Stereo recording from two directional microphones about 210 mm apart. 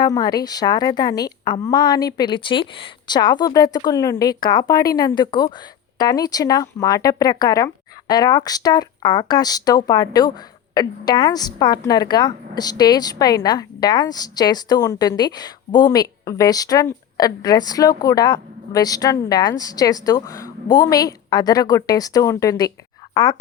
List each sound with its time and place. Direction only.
0.0 s a woman's voice: 20° left (ahead or behind)